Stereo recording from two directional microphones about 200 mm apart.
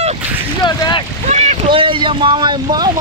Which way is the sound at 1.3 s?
35° right (ahead or behind).